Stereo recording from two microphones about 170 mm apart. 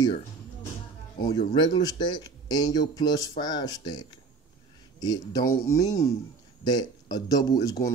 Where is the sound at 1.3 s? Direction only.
30° left (ahead or behind).